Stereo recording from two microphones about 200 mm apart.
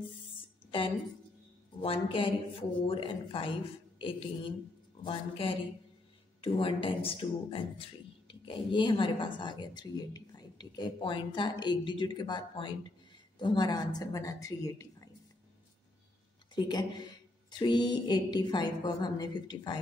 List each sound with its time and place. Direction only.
0.7 s a woman's voice: 25° left (ahead or behind)
16.5 s a woman's voice: 20° left (ahead or behind)